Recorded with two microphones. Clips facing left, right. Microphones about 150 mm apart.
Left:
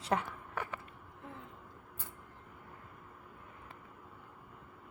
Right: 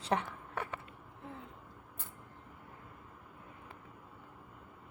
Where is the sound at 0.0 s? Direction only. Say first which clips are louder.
Even; 25° right (ahead or behind).